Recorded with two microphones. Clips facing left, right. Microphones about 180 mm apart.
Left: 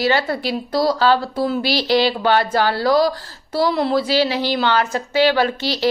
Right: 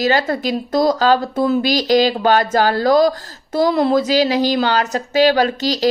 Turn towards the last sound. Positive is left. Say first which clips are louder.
# right 2 dB
turn(degrees=-40)  # may be behind; listen again after turning